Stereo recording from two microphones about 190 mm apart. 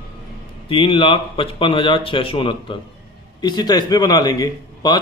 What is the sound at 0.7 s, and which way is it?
A man's voice, 25° left (ahead or behind).